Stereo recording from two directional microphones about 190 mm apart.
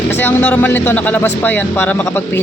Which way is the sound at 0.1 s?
10° left (ahead or behind).